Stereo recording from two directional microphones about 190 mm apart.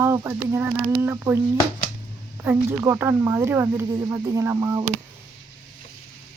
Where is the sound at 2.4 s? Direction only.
10° right (ahead or behind).